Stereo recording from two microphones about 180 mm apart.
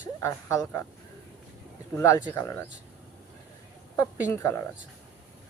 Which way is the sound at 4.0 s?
15° left (ahead or behind).